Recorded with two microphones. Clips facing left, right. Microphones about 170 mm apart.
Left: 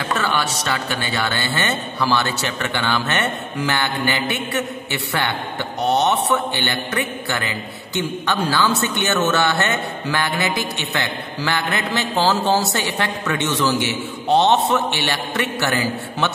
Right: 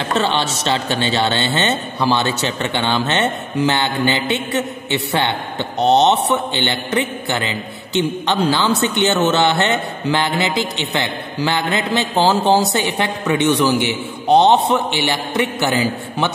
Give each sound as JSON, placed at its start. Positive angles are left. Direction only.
{"t": 0.1, "sound": "a man's voice", "side_deg": -25}